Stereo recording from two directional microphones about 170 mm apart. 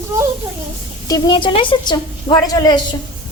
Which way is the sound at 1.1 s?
25° left (ahead or behind).